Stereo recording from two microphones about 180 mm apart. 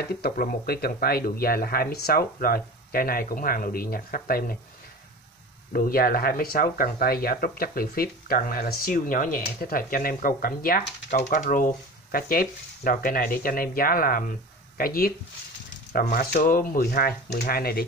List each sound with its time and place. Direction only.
0.1 s speech: 55° left (ahead or behind)
5.7 s speech: 55° left (ahead or behind)